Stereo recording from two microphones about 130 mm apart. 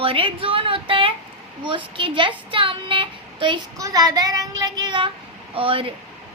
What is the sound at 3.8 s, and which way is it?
Child singing, 30° right (ahead or behind).